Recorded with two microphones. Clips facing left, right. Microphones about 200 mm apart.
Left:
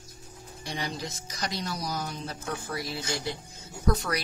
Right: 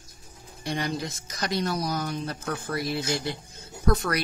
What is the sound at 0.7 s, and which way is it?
Speech, 55° right (ahead or behind).